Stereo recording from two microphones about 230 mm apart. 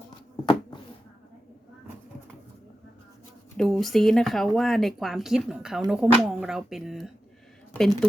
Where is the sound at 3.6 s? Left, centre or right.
Centre.